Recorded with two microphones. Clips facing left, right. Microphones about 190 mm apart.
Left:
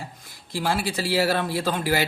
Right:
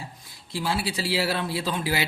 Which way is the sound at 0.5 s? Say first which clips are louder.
Left 2 dB; 45° left (ahead or behind).